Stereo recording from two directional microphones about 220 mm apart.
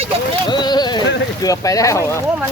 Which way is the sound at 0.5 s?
20° left (ahead or behind).